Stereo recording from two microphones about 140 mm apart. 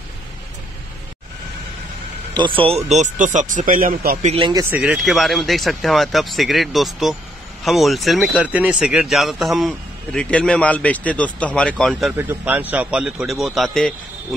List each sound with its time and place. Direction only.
2.3 s speech: 35° right (ahead or behind); by 4.3 s 80° right
4.3 s speech: 35° right (ahead or behind)
4.6 s speech: 10° right (ahead or behind)
12.2 s speech: 15° right (ahead or behind); by 13.9 s centre (ahead or behind)